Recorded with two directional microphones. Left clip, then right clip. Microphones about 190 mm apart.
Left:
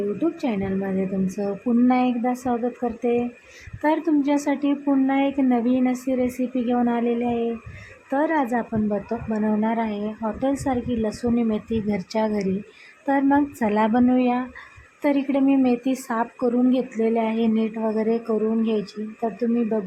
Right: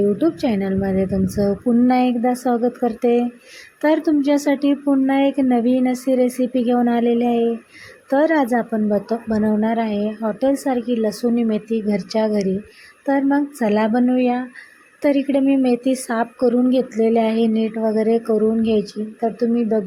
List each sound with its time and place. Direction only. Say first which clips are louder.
0.2 s a woman's voice: right 5 dB; 25° right (ahead or behind)